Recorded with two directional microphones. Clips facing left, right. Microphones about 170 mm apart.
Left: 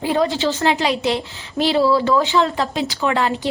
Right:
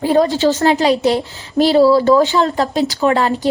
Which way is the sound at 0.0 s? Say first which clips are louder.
Right 5 dB; 40° right (ahead or behind).